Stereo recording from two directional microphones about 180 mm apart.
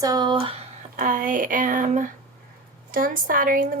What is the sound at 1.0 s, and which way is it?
Speech, 45° right (ahead or behind).